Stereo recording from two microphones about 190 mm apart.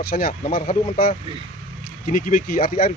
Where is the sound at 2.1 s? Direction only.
45° left (ahead or behind).